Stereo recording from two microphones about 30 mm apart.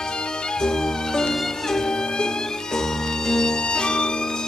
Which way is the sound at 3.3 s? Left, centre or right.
Centre.